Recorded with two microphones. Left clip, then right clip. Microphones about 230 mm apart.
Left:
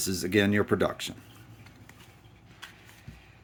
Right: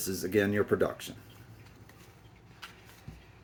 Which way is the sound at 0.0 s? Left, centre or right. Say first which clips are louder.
Left 3 dB; left.